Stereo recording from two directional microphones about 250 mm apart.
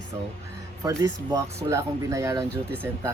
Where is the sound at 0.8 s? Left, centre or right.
Centre.